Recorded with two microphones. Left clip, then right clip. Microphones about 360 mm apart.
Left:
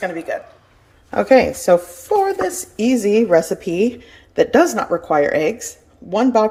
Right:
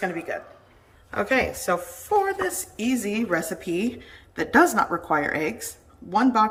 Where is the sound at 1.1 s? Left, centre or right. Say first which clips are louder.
Left 10 dB; centre.